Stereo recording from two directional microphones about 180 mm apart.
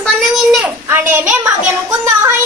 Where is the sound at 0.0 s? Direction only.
Centre (ahead or behind).